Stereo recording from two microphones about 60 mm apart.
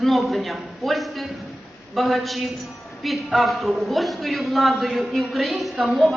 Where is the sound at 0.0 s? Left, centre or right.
Centre.